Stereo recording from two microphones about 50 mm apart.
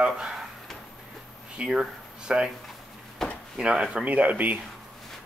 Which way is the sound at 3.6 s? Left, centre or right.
Centre.